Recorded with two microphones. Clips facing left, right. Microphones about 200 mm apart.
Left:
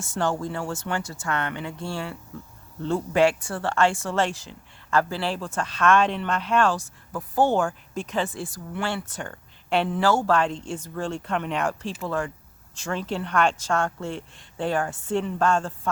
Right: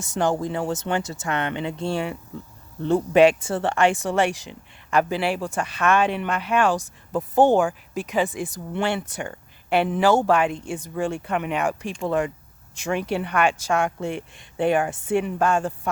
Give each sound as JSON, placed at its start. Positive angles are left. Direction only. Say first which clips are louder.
{"t": 0.0, "sound": "speech", "louder": "right 3 dB", "side_deg": -15}
{"t": 9.9, "sound": "speech", "louder": "right 3 dB", "side_deg": -20}